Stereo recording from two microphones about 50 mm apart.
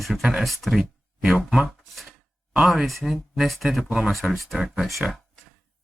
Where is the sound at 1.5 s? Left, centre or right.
Centre.